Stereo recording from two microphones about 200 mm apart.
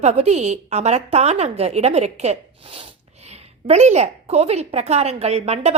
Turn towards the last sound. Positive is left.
turn(degrees=-35)  # may be behind; listen again after turning